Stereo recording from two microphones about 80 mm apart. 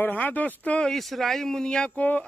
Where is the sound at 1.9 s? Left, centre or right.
Centre.